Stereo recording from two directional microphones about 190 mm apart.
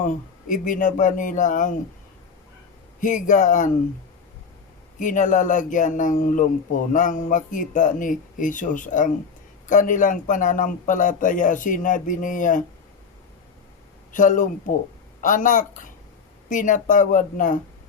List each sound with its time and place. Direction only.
0.0 s speech: 40° left (ahead or behind)
3.0 s a man's voice: 40° left (ahead or behind)
4.9 s speech: 45° left (ahead or behind)
14.1 s speech: 40° left (ahead or behind)